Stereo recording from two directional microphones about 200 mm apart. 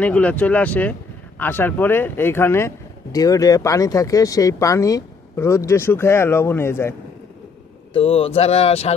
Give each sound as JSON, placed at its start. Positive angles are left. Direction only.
{"t": 0.0, "sound": "speech", "side_deg": 5}
{"t": 7.9, "sound": "speech", "side_deg": 30}